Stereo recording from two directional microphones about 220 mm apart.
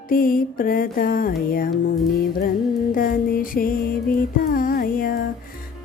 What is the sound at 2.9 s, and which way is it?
Music, 40° left (ahead or behind).